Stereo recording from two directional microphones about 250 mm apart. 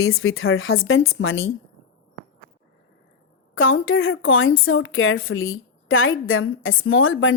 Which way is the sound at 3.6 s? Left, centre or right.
Left.